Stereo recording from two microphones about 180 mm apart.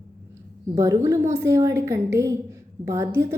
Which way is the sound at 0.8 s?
20° right (ahead or behind).